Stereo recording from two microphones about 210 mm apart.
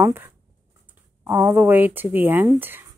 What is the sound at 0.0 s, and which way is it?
Speech, 10° right (ahead or behind).